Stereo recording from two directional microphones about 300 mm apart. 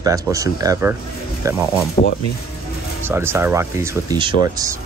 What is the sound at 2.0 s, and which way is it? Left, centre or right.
Speech, centre.